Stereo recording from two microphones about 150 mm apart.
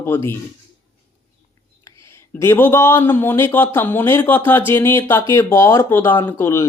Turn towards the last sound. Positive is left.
turn(degrees=15)  # may be behind; listen again after turning